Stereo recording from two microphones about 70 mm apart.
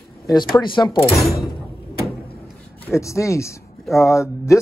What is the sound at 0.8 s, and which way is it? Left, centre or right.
Speech, left.